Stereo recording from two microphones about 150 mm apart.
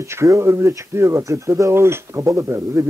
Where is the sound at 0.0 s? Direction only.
20° right (ahead or behind).